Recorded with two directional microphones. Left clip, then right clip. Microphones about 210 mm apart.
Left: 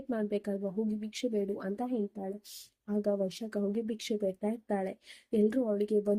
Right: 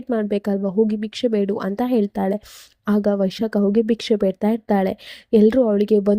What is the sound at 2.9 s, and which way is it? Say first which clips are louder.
Speech: right 11 dB; 35° right (ahead or behind).